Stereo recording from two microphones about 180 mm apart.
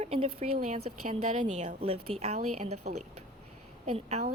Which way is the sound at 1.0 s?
45° right (ahead or behind).